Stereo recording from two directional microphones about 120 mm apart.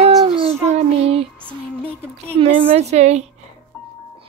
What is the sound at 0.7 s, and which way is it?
Child singing, 55° right (ahead or behind).